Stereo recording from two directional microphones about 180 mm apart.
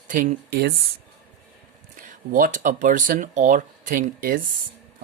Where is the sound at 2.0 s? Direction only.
50° right (ahead or behind).